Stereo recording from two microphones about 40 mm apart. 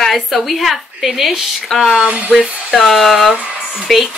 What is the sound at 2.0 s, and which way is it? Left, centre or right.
Speech, right.